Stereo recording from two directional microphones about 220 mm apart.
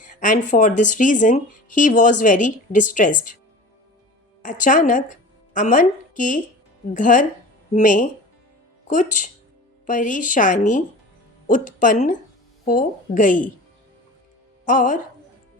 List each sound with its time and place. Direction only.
0.0 s speech: 35° left (ahead or behind)
4.4 s speech: 35° left (ahead or behind)
14.6 s speech: 35° left (ahead or behind)